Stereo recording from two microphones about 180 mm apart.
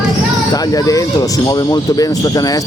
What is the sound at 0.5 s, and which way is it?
Speech, 20° left (ahead or behind).